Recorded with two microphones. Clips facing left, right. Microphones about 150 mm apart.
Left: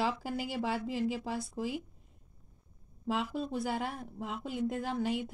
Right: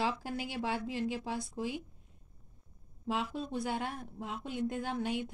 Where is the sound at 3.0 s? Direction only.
Centre (ahead or behind).